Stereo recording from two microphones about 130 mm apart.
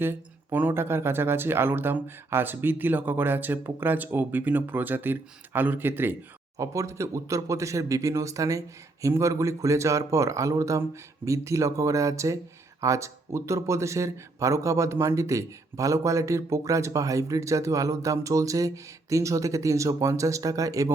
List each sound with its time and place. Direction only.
0.0 s speech: 15° right (ahead or behind)